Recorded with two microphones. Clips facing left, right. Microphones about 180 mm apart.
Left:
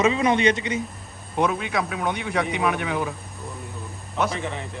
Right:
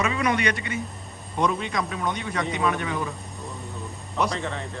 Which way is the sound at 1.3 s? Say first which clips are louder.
Left 2 dB; 5° left (ahead or behind).